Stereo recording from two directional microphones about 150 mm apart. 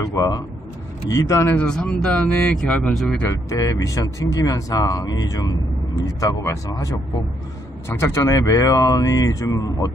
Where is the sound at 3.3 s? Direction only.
20° left (ahead or behind).